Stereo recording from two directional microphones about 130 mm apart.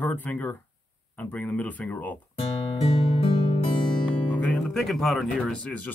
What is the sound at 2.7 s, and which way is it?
Music, 50° left (ahead or behind).